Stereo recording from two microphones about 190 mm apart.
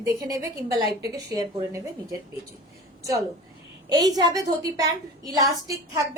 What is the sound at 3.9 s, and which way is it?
A woman's voice, 20° right (ahead or behind).